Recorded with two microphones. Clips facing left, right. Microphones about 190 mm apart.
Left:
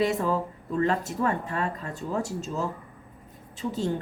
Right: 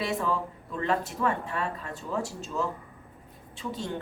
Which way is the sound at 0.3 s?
40° left (ahead or behind).